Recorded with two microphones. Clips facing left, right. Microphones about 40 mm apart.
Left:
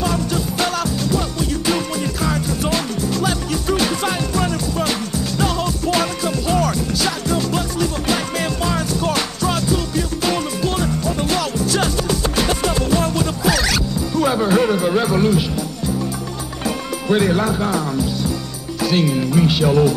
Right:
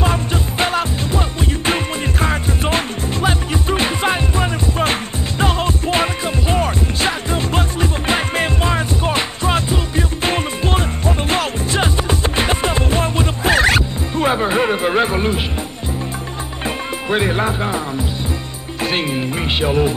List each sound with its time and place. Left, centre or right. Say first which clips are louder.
0.0 s music: right 1 dB; right
2.2 s music: right 1 dB; right
16.6 s speech: left 1 dB; right
18.8 s music: left 2 dB; right